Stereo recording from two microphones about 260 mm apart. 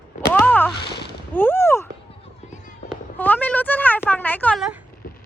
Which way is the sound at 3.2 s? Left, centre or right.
Centre.